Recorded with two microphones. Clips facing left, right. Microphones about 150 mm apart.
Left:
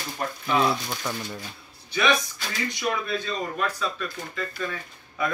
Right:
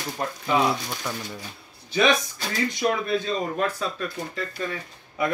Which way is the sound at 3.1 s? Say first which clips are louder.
Right 4 dB; 30° right (ahead or behind).